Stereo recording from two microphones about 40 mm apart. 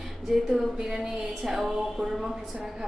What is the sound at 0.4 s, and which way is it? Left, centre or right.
A woman's voice, centre.